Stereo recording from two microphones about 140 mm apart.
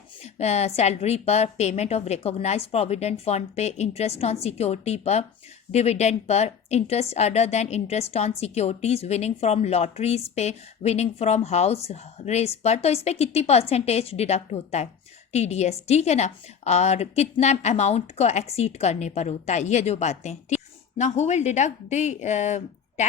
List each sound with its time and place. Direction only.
0.2 s a woman's voice: 50° left (ahead or behind)